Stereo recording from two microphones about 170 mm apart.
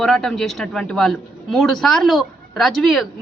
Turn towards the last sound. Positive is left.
turn(degrees=0)  # may be behind; listen again after turning